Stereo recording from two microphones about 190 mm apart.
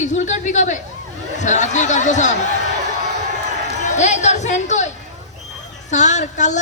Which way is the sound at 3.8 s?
40° left (ahead or behind).